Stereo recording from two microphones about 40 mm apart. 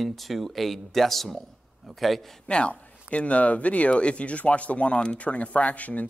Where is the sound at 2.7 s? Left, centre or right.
Left.